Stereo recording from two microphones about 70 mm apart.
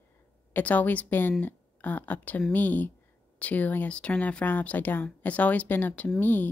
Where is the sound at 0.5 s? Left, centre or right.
Left.